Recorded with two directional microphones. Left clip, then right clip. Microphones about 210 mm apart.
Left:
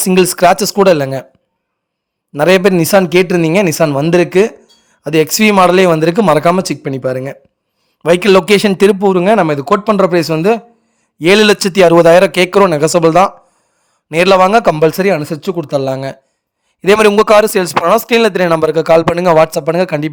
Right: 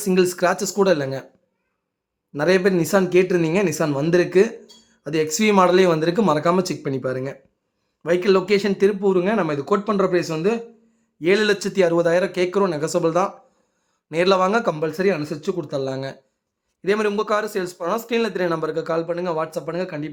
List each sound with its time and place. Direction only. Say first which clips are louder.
0.0 s speech: left 10 dB; 45° left (ahead or behind)
2.3 s a man's voice: left 9 dB; 45° left (ahead or behind)
8.0 s a man's voice: left 10 dB; 50° left (ahead or behind)